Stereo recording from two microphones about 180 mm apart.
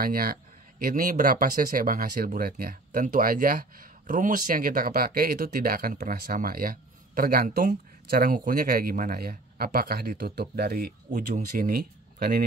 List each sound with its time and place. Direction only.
0.0 s speech: 55° right (ahead or behind)